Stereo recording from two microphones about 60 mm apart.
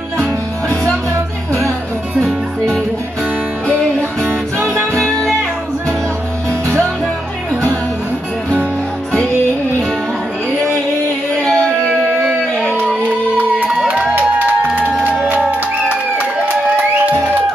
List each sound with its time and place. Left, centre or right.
2.1 s music: centre
4.6 s music: left
11.4 s music: centre
14.1 s music: right